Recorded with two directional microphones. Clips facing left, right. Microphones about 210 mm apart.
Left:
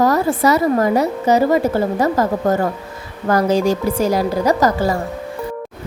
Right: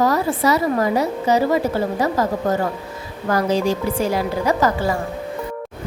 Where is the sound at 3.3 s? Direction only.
45° left (ahead or behind).